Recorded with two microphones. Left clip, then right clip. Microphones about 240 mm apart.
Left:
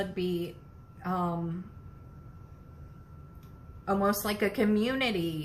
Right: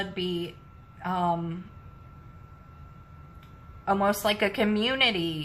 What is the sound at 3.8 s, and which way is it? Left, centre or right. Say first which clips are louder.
A woman's voice: right 4 dB; right.